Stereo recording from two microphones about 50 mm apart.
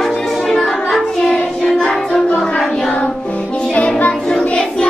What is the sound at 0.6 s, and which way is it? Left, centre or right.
Child singing, centre.